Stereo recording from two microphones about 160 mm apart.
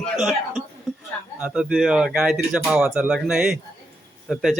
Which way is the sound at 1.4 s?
5° right (ahead or behind).